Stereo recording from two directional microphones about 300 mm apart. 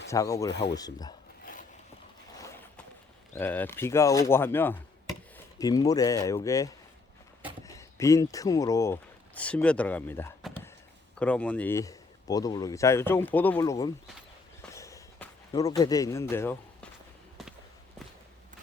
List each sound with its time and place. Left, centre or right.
0.1 s speech: centre
1.5 s a sound: left
3.3 s speech: centre
14.7 s walk: centre
15.8 s speech: centre
16.3 s a sound: centre